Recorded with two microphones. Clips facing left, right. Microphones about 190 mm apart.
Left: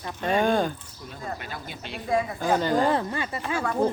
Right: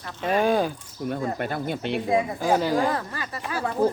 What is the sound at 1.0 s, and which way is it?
Speech, 60° right (ahead or behind).